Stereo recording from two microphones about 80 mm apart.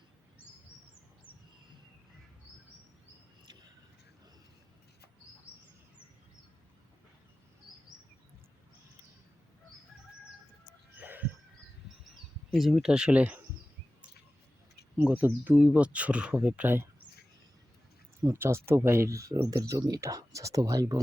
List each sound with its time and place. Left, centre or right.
11.0 s a sound: right
12.5 s speech: centre
15.0 s speech: right
18.3 s speech: right